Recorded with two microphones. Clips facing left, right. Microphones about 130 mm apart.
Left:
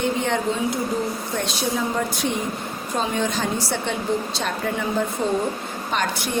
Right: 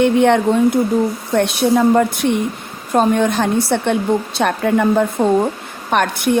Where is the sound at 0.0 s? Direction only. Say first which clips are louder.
Right 10 dB; 65° right (ahead or behind).